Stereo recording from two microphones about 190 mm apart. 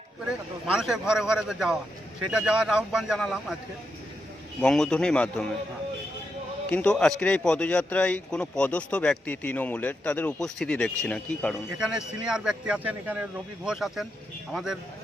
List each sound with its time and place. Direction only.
0.7 s a man's voice: 5° right (ahead or behind)
4.6 s a man's voice: 5° left (ahead or behind)
6.7 s a man's voice: 5° left (ahead or behind)